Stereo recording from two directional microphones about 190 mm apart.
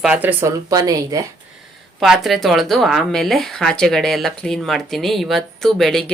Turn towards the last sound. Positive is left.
turn(degrees=0)  # may be behind; listen again after turning